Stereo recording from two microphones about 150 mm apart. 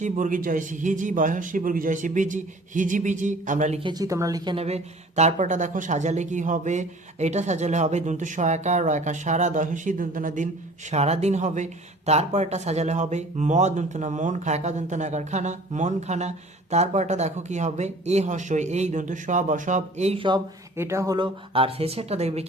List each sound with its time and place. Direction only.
0.0 s a man's voice: 60° right (ahead or behind)
3.8 s a woman's voice: 25° right (ahead or behind)
4.5 s speech: 45° right (ahead or behind); by 10.5 s 60° right (ahead or behind)
10.9 s speech: 45° right (ahead or behind)
20.7 s a woman's voice: 20° right (ahead or behind)
21.5 s speech: 40° right (ahead or behind)